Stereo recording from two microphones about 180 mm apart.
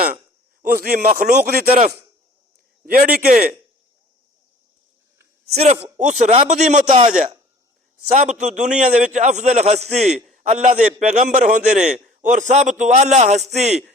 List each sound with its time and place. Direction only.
0.7 s speech: 55° right (ahead or behind)
2.8 s speech: 55° right (ahead or behind)
5.5 s a man's voice: 35° right (ahead or behind)
8.1 s a man's voice: 40° right (ahead or behind)